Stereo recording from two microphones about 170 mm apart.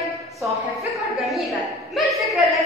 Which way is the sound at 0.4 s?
Centre (ahead or behind).